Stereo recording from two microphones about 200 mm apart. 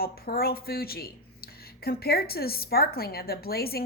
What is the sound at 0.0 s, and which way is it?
A woman's voice, 50° left (ahead or behind).